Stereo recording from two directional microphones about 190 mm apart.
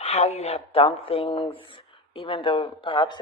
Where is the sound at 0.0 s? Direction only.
35° left (ahead or behind).